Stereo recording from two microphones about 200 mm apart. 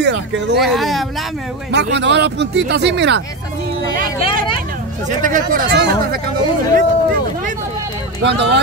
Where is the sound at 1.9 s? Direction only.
60° right (ahead or behind).